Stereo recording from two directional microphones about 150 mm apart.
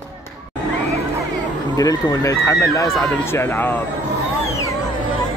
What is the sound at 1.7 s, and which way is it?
A man's voice, 25° left (ahead or behind).